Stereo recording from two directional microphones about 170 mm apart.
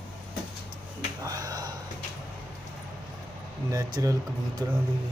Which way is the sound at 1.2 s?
20° right (ahead or behind).